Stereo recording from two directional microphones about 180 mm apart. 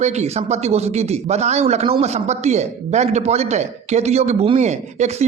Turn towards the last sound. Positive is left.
turn(degrees=-40)  # may be behind; listen again after turning